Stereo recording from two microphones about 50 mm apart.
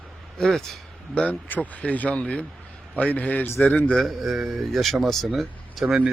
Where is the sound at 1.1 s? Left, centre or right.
Left.